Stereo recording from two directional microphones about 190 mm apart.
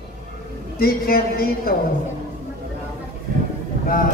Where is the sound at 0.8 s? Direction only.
55° left (ahead or behind).